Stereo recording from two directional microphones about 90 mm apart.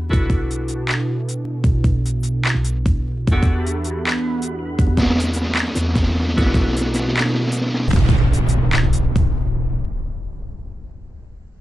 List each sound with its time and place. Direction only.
0.0 s music: centre (ahead or behind)